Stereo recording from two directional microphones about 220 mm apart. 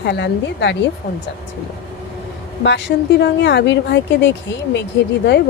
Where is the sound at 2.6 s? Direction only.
50° left (ahead or behind).